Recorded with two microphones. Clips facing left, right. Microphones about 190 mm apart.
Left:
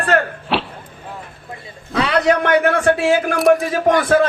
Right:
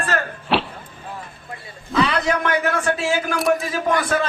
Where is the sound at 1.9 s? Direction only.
60° left (ahead or behind).